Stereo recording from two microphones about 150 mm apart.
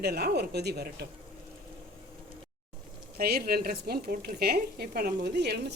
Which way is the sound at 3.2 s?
90° right.